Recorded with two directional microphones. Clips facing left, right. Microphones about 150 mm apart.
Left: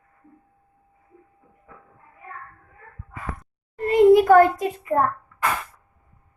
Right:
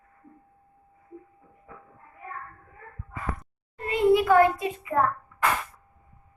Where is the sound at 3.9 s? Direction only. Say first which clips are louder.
Left 7 dB; 45° left (ahead or behind).